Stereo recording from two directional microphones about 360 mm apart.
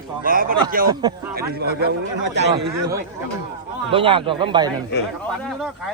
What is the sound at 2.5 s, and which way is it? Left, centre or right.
A man's voice, centre.